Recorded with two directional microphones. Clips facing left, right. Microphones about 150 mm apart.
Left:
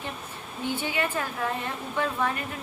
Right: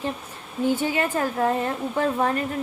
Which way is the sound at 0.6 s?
40° right (ahead or behind).